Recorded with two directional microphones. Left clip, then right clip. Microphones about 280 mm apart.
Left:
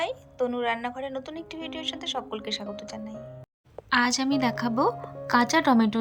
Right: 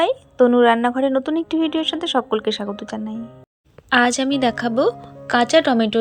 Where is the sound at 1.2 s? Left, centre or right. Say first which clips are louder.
Right 16 dB; centre.